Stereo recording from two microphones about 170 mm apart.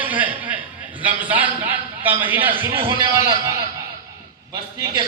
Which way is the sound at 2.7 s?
30° right (ahead or behind).